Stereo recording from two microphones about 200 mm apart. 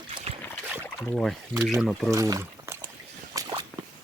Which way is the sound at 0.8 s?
5° left (ahead or behind).